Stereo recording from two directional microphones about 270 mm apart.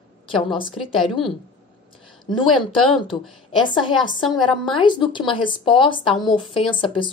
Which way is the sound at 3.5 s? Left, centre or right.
Centre.